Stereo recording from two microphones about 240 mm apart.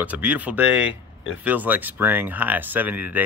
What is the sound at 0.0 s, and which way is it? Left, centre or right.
Speech, centre.